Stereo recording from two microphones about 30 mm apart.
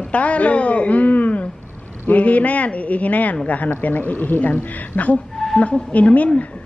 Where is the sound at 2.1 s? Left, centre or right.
Left.